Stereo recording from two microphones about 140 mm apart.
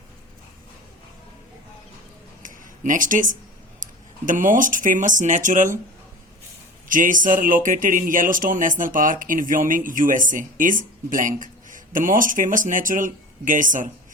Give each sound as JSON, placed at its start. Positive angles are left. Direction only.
{"t": 2.4, "sound": "a sound", "side_deg": -70}
{"t": 4.3, "sound": "speech", "side_deg": -70}
{"t": 6.8, "sound": "speech", "side_deg": -70}